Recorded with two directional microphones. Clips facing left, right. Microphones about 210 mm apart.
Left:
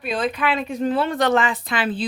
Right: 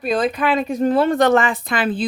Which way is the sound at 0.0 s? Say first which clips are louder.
Right 4 dB; 40° right (ahead or behind).